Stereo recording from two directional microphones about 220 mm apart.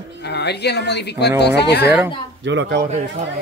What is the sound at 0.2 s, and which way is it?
Speech, 50° left (ahead or behind).